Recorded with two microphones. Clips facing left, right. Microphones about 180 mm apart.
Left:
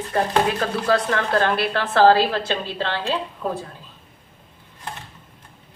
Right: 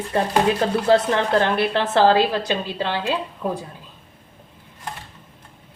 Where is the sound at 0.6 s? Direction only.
25° right (ahead or behind).